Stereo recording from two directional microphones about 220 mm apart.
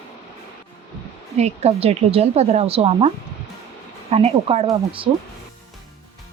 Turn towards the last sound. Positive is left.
turn(degrees=-25)  # may be behind; listen again after turning